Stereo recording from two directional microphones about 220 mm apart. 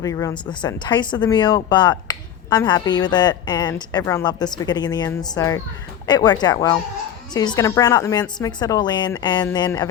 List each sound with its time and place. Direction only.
0.0 s a woman's voice: 15° left (ahead or behind)